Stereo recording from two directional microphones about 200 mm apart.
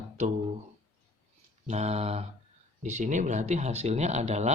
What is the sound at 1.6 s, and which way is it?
Speech, 35° right (ahead or behind).